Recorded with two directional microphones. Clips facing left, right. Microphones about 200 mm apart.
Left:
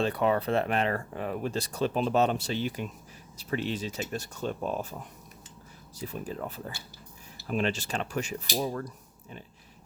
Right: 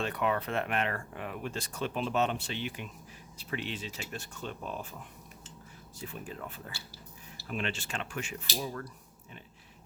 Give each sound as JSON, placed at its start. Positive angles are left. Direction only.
{"t": 0.0, "sound": "speech", "side_deg": 35}
{"t": 6.0, "sound": "speech", "side_deg": 40}